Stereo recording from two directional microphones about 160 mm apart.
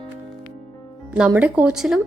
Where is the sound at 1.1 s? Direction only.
10° right (ahead or behind).